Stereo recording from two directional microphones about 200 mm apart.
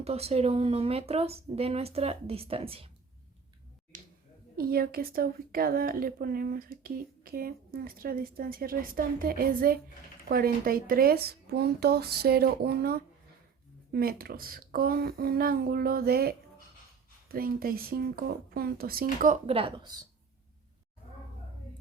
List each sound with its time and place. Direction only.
0.0 s speech: 30° right (ahead or behind)
3.9 s finger snapping: 40° right (ahead or behind)
4.5 s speech: 50° right (ahead or behind)
19.2 s speech: 35° right (ahead or behind)